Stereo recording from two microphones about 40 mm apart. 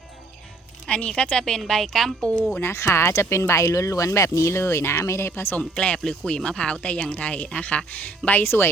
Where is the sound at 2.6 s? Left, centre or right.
Left.